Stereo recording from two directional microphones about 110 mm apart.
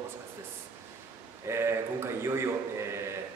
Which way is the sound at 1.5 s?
25° right (ahead or behind).